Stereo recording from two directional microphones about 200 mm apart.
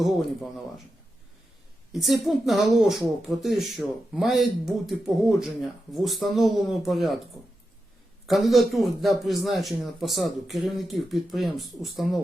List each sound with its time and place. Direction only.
0.0 s speech: centre (ahead or behind)
1.9 s speech: centre (ahead or behind)
8.3 s speech: centre (ahead or behind)